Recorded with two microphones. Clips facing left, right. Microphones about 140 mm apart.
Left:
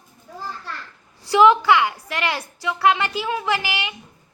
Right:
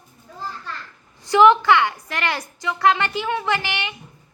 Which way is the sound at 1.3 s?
10° left (ahead or behind).